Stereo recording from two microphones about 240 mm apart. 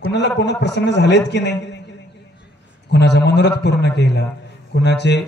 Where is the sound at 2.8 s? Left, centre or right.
Left.